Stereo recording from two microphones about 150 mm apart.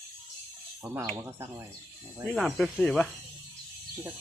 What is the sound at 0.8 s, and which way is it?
Speech, 20° right (ahead or behind).